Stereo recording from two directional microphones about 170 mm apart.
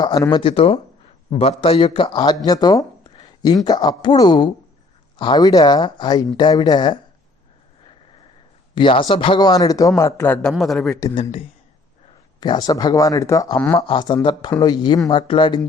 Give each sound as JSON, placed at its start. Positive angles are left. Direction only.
{"t": 0.0, "sound": "speech", "side_deg": 25}
{"t": 8.7, "sound": "speech", "side_deg": 30}
{"t": 11.1, "sound": "speech", "side_deg": 30}
{"t": 13.7, "sound": "speech", "side_deg": 30}